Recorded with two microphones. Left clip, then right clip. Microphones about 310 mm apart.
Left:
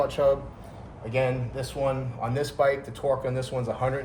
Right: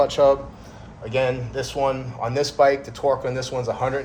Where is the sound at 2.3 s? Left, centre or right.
Centre.